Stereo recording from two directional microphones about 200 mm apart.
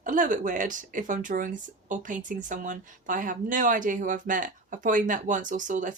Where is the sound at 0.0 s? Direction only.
40° right (ahead or behind).